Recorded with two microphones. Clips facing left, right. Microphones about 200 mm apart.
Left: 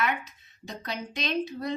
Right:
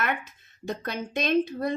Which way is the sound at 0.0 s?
55° right (ahead or behind).